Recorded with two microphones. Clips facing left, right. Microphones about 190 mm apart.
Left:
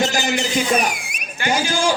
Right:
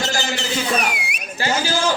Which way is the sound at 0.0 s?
20° left (ahead or behind).